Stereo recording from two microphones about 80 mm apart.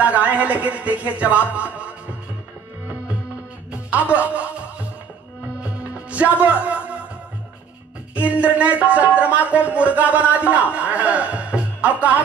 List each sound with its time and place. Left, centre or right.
0.0 s a man's voice: centre
3.7 s speech: centre
5.6 s music: centre
8.1 s a man's voice: centre